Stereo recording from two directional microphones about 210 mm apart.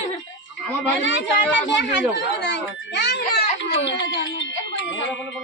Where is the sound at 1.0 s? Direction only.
60° left (ahead or behind).